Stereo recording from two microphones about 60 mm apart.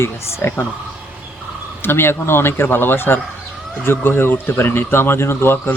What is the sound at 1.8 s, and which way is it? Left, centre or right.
A man's voice, left.